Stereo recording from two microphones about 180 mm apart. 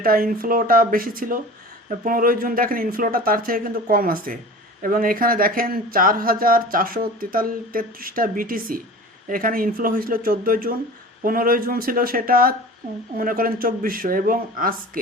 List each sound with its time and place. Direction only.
0.0 s speech: 55° right (ahead or behind)